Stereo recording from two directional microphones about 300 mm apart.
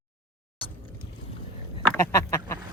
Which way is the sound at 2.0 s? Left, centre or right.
Centre.